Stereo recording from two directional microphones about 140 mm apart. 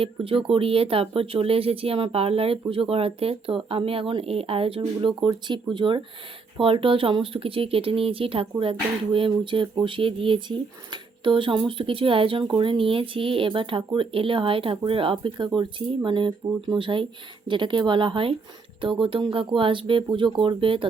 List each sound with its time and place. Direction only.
0.0 s speech: 40° right (ahead or behind)